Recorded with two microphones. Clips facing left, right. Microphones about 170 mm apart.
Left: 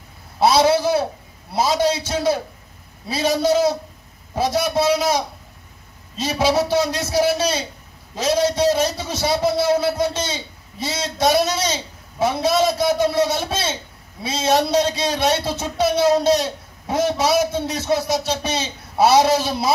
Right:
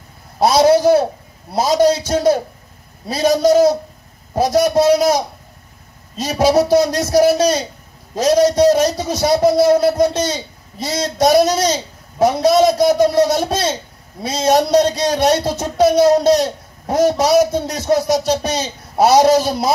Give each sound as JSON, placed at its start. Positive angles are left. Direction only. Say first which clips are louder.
{"t": 0.4, "sound": "a man's voice", "louder": "right 4 dB", "side_deg": -40}